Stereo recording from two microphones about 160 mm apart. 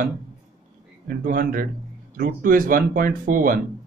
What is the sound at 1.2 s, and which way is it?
Speech, 60° right (ahead or behind).